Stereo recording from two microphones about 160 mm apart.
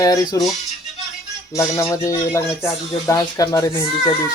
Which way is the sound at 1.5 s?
20° left (ahead or behind).